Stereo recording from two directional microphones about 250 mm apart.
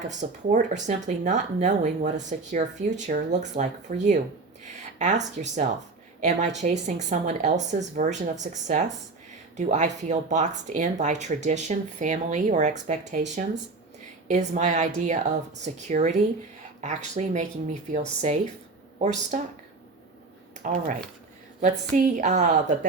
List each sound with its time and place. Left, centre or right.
0.1 s speech: right
20.6 s speech: right